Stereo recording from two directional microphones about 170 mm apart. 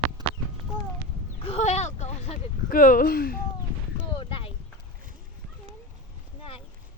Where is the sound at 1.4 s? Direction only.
40° left (ahead or behind).